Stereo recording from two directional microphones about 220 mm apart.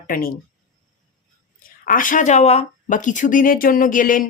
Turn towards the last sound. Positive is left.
turn(degrees=35)  # may be behind; listen again after turning